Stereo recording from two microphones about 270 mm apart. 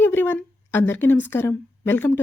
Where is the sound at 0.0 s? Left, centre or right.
Centre.